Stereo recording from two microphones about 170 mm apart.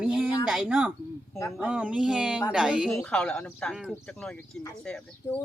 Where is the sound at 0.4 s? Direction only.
5° right (ahead or behind).